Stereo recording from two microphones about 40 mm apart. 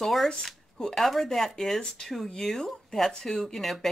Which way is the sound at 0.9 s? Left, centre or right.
Centre.